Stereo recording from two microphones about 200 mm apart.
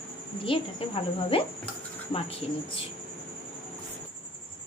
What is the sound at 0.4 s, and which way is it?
Speech, 25° left (ahead or behind).